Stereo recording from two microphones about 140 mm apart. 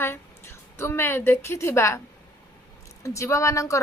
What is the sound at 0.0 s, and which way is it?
A woman's voice, 20° left (ahead or behind).